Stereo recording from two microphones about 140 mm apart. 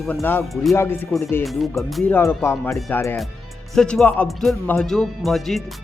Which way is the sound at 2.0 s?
10° left (ahead or behind).